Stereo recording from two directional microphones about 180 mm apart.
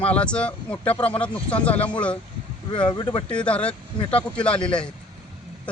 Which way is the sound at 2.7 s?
30° left (ahead or behind).